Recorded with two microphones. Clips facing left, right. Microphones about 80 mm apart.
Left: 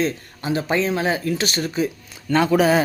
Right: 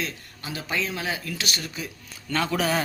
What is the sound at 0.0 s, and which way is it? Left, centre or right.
Speech, left.